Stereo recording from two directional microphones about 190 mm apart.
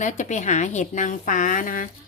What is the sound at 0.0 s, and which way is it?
Speech, 40° left (ahead or behind).